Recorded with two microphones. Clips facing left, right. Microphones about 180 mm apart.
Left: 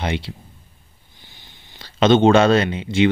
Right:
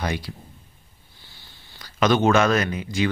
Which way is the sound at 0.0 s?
25° left (ahead or behind).